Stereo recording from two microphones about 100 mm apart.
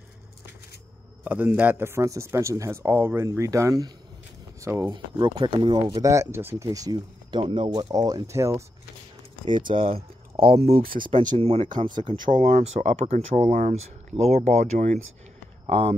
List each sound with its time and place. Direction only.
1.2 s speech: 20° right (ahead or behind)
4.9 s speech: 55° right (ahead or behind)
5.8 s speech: 35° right (ahead or behind)
7.2 s speech: 55° right (ahead or behind)
7.9 s speech: 40° right (ahead or behind)
9.5 s speech: 50° right (ahead or behind)
10.4 s speech: 85° right
14.2 s speech: 90° right
15.6 s speech: 90° right